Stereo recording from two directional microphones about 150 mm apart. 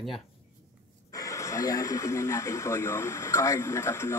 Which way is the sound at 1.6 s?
20° left (ahead or behind).